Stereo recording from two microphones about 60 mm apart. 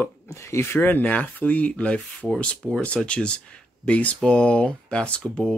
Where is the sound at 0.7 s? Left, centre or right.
Left.